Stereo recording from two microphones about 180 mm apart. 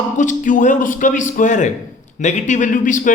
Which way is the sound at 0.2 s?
45° left (ahead or behind).